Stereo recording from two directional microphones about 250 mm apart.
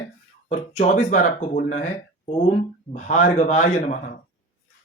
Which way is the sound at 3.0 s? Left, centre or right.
Left.